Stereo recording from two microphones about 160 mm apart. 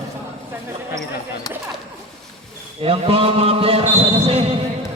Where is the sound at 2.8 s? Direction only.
35° right (ahead or behind).